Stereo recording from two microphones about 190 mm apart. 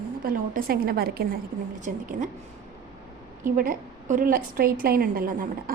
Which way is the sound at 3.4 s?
45° right (ahead or behind).